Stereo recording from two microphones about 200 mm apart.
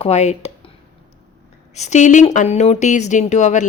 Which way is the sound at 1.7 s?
35° left (ahead or behind).